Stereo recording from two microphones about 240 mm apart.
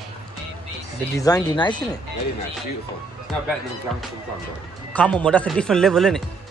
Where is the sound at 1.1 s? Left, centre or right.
Centre.